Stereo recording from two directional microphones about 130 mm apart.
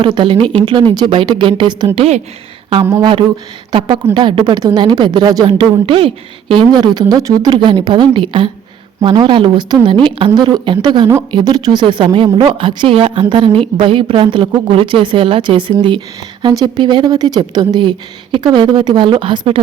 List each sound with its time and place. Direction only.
0.0 s a woman's voice: 40° right (ahead or behind)
2.0 s speech: 55° right (ahead or behind)
3.0 s a woman's voice: 40° right (ahead or behind)
6.7 s a woman's voice: 30° right (ahead or behind)